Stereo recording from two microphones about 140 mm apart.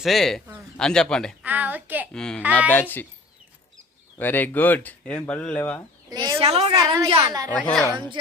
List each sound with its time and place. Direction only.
0.0 s a man's voice: centre (ahead or behind)
1.5 s a child's voice: 10° right (ahead or behind)
2.1 s a man's voice: 5° left (ahead or behind)
4.2 s speech: 15° left (ahead or behind)
6.1 s a sound: 30° right (ahead or behind)
6.4 s a woman's voice: 45° right (ahead or behind)
6.7 s a woman's voice: 25° right (ahead or behind)
7.5 s speech: 5° left (ahead or behind)